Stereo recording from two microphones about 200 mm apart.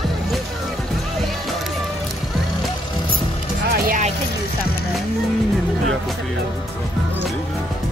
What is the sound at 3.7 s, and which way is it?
Vehicle, 45° right (ahead or behind).